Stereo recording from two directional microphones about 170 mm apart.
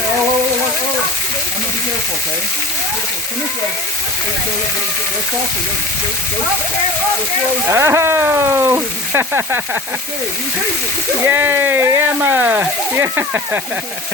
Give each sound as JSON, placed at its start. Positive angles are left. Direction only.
{"t": 7.7, "sound": "speech", "side_deg": -15}
{"t": 11.3, "sound": "speech", "side_deg": -15}